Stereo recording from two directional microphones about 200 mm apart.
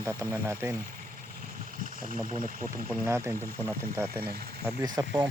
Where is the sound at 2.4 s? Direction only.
40° right (ahead or behind).